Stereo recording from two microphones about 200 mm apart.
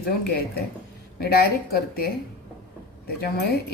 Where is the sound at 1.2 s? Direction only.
50° left (ahead or behind).